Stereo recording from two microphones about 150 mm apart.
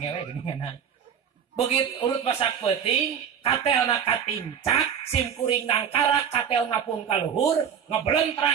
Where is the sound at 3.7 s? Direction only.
30° left (ahead or behind).